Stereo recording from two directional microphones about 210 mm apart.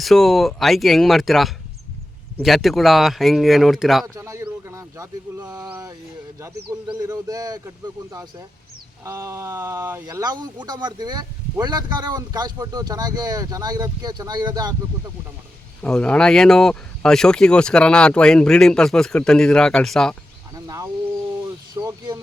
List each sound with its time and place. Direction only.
0.0 s speech: centre (ahead or behind)
4.0 s speech: 15° right (ahead or behind)
15.8 s speech: 5° left (ahead or behind)
20.7 s speech: 15° right (ahead or behind)
21.8 s a sound: 15° right (ahead or behind)